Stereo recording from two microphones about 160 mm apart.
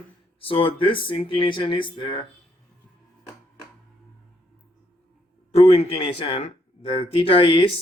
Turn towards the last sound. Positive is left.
turn(degrees=35)  # may be behind; listen again after turning